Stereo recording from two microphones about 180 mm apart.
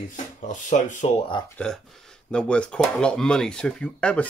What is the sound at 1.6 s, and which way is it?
Speech, 5° left (ahead or behind).